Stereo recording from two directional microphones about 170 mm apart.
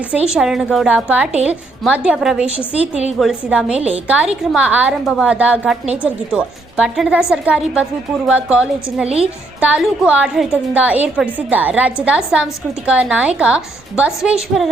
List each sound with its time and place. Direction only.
0.3 s a woman's voice: centre (ahead or behind)
9.0 s a woman's voice: 35° right (ahead or behind)
9.6 s a woman's voice: 5° right (ahead or behind)